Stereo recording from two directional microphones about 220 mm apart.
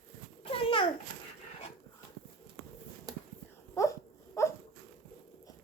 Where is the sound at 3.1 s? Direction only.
15° right (ahead or behind).